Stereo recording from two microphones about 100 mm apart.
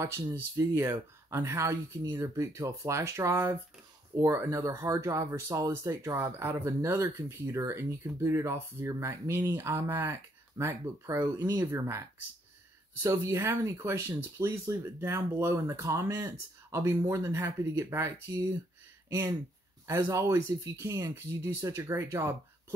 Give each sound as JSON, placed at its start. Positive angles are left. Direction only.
{"t": 0.4, "sound": "speech", "side_deg": -25}
{"t": 11.4, "sound": "speech", "side_deg": -35}
{"t": 20.0, "sound": "speech", "side_deg": -30}